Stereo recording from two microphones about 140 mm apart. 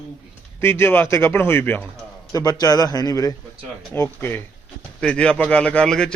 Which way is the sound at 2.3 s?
25° left (ahead or behind).